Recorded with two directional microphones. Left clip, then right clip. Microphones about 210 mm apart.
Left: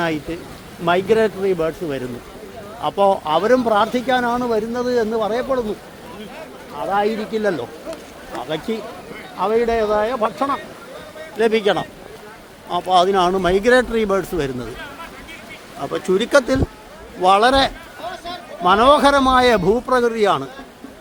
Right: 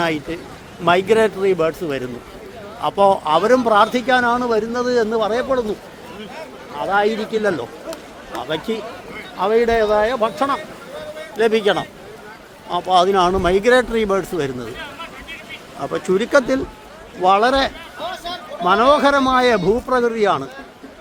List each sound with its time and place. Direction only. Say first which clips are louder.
0.0 s speech: right 1 dB; 10° right (ahead or behind)
6.7 s speech: right 2 dB; centre (ahead or behind)
15.8 s speech: even; 5° left (ahead or behind)
18.0 s a sound: right 2 dB; 40° right (ahead or behind)
18.6 s speech: left 1 dB; 10° left (ahead or behind)